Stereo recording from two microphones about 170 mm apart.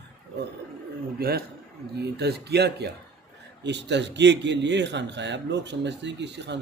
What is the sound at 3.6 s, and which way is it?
A man's voice, 90° right.